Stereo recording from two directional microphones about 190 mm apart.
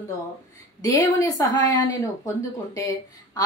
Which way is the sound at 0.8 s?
15° left (ahead or behind).